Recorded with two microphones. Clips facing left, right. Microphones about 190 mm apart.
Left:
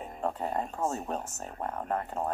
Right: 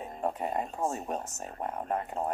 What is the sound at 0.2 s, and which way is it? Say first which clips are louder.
Speech: even; 15° right (ahead or behind).